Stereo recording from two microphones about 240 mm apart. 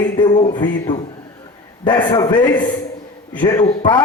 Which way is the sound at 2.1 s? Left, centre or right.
Centre.